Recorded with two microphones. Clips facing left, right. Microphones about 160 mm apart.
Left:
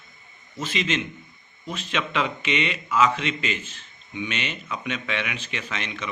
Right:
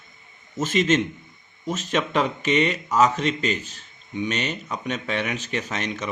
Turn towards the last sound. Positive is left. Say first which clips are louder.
# right 5 dB
turn(degrees=-40)  # may be behind; listen again after turning